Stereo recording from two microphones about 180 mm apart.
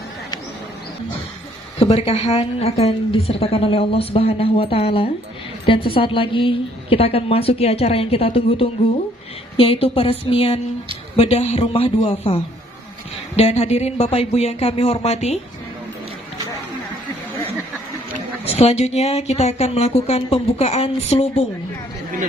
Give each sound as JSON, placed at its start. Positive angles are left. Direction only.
{"t": 1.8, "sound": "a woman's voice", "side_deg": 35}
{"t": 18.4, "sound": "a woman's voice", "side_deg": 35}